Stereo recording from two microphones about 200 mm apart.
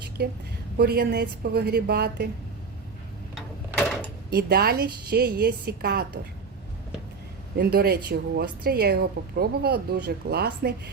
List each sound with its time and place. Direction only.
0.2 s speech: 50° right (ahead or behind)
3.3 s a sound: 5° left (ahead or behind)
4.3 s speech: 55° right (ahead or behind)
7.5 s speech: 50° right (ahead or behind)